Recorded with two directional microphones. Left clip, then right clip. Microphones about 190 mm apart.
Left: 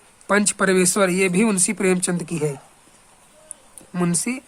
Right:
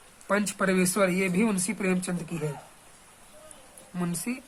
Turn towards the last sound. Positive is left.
turn(degrees=40)  # may be behind; listen again after turning